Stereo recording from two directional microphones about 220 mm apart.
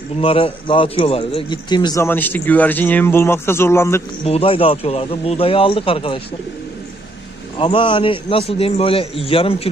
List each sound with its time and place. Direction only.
0.2 s a man's voice: 25° left (ahead or behind)
4.3 s a man's voice: 25° left (ahead or behind)
7.5 s a man's voice: 20° left (ahead or behind)